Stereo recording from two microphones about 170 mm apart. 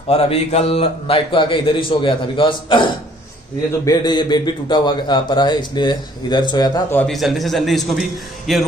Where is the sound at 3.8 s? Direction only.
25° left (ahead or behind).